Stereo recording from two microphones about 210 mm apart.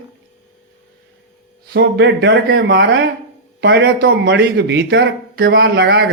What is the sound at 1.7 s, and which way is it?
A man's voice, 55° right (ahead or behind).